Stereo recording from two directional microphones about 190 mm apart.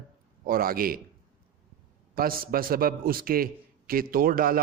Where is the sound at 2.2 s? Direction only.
50° right (ahead or behind).